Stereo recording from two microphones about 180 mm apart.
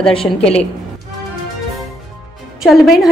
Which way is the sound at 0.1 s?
30° left (ahead or behind).